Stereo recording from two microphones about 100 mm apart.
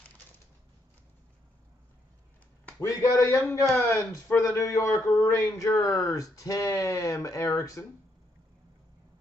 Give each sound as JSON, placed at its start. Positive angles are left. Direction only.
{"t": 2.8, "sound": "speech", "side_deg": 30}